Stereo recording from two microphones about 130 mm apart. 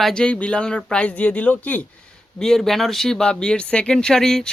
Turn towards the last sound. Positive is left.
turn(degrees=5)  # may be behind; listen again after turning